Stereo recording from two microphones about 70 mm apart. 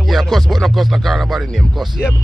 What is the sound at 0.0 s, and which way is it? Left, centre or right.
Speech, centre.